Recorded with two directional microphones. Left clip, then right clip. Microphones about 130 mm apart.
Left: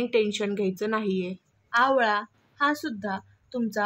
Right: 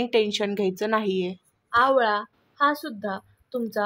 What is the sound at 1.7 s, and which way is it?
A woman's voice, 15° right (ahead or behind).